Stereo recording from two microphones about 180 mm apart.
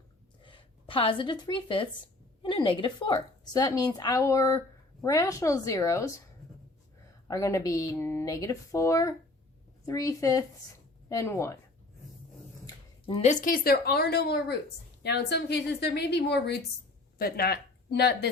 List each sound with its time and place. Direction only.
0.4 s a woman's voice: 30° left (ahead or behind)
7.3 s a woman's voice: 20° left (ahead or behind)
12.6 s a woman's voice: 30° left (ahead or behind); by 16.6 s 65° left (ahead or behind)
17.2 s speech: 55° left (ahead or behind)